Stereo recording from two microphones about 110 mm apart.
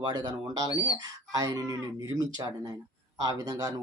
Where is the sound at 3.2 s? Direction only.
35° right (ahead or behind).